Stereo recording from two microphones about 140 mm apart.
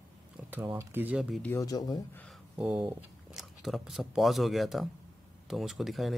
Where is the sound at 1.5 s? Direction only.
25° left (ahead or behind).